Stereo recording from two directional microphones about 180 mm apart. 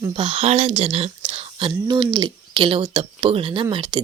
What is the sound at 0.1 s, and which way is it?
Speech, 30° right (ahead or behind).